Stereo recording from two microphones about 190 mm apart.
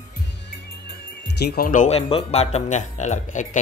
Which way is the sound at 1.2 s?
55° left (ahead or behind).